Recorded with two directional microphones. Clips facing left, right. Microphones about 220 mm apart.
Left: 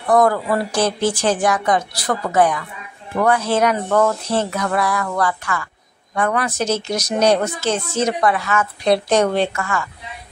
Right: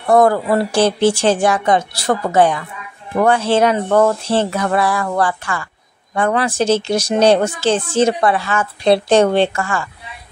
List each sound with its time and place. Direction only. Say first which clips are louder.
0.0 s speech: right 3 dB; 25° right (ahead or behind)